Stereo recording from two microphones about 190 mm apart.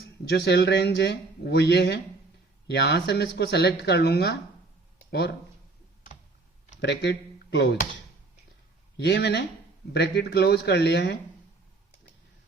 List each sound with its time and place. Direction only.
0.0 s speech: 65° left (ahead or behind)
6.8 s speech: 65° left (ahead or behind)
9.0 s speech: 65° left (ahead or behind)